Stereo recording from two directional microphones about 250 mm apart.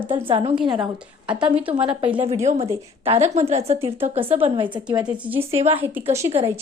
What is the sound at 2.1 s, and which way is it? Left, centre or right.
A woman's voice, right.